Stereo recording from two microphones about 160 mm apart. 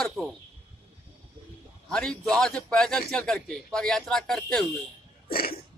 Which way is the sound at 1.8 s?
5° left (ahead or behind).